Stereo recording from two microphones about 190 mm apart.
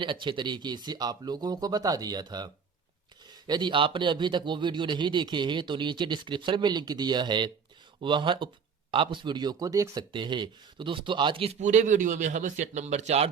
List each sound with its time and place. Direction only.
0.0 s speech: 25° right (ahead or behind)